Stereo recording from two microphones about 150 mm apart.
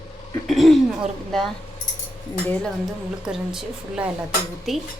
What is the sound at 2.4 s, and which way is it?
Speech, 10° left (ahead or behind).